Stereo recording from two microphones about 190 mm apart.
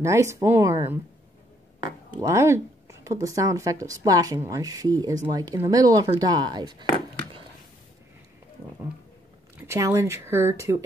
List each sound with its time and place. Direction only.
0.0 s speech: 15° right (ahead or behind)
2.2 s speech: 15° right (ahead or behind)
9.7 s speech: 15° right (ahead or behind)